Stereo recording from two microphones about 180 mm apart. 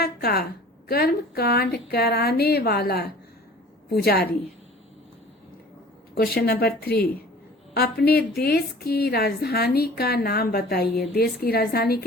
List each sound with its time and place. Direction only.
0.0 s a woman's voice: 60° left (ahead or behind)
6.1 s a woman's voice: 60° left (ahead or behind)